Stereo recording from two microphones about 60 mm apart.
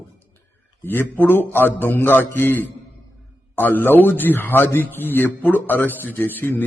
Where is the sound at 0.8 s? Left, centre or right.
Left.